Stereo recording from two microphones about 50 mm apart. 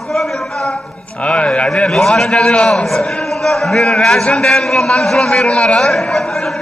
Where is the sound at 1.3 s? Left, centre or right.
Left.